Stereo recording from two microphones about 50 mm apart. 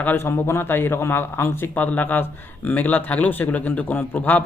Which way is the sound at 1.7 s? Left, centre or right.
Left.